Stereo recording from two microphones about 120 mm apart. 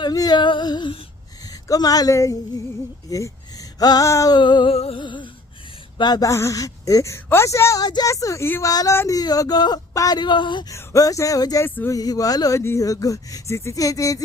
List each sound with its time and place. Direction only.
0.0 s a woman's voice: 35° left (ahead or behind)
4.4 s speech: 40° left (ahead or behind)
4.7 s music: 55° left (ahead or behind)
5.0 s music: 45° left (ahead or behind)
6.0 s a woman's voice: 35° left (ahead or behind)
10.7 s a woman's voice: 30° left (ahead or behind)
11.6 s speech: 15° left (ahead or behind)
11.9 s a woman's voice: 30° left (ahead or behind)